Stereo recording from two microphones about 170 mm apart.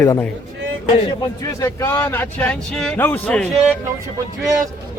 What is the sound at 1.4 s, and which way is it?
Speech, 15° left (ahead or behind).